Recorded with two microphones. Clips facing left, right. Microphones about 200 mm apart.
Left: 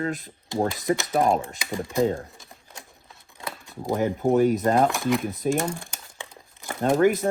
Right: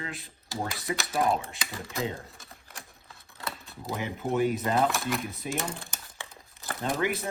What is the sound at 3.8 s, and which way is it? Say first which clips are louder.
Speech: left 10 dB; 45° left (ahead or behind).